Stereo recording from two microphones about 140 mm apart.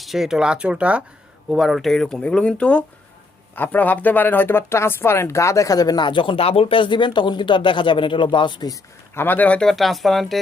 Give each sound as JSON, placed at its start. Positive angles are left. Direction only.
{"t": 0.0, "sound": "speech", "side_deg": 0}
{"t": 9.1, "sound": "speech", "side_deg": 15}